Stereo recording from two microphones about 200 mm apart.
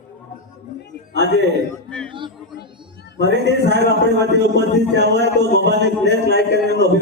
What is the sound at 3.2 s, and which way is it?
A man's voice, 60° right (ahead or behind).